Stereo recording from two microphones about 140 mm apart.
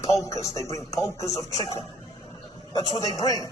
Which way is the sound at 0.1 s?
20° left (ahead or behind).